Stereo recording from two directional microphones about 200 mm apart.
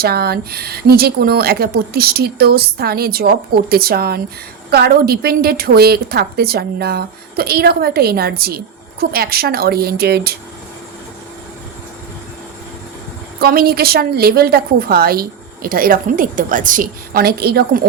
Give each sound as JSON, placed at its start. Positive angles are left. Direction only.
{"t": 0.0, "sound": "a woman's voice", "side_deg": -50}
{"t": 13.4, "sound": "a woman's voice", "side_deg": -50}